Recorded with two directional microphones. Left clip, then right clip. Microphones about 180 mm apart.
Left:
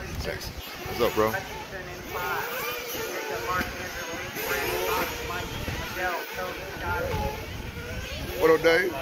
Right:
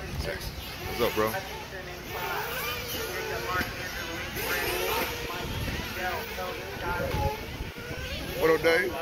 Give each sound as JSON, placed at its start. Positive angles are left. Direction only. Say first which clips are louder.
{"t": 0.9, "sound": "speech", "louder": "left 3 dB", "side_deg": 15}
{"t": 2.5, "sound": "a sound", "louder": "left 1 dB", "side_deg": 65}
{"t": 3.3, "sound": "music", "louder": "left 2 dB", "side_deg": 60}
{"t": 4.5, "sound": "vehicle", "louder": "left 2 dB", "side_deg": 65}
{"t": 8.4, "sound": "speech", "louder": "left 3 dB", "side_deg": 20}